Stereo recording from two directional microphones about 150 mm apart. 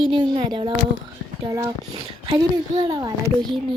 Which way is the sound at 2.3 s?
35° right (ahead or behind).